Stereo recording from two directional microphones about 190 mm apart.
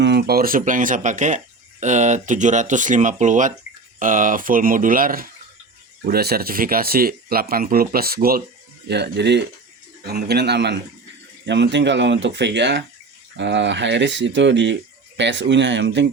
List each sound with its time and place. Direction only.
0.0 s speech: 60° right (ahead or behind)
8.9 s a man's voice: 65° right (ahead or behind)